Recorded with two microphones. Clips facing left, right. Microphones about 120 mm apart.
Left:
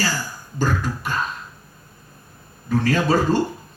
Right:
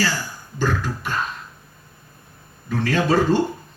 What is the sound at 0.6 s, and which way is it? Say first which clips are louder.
Speech: even; 40° left (ahead or behind).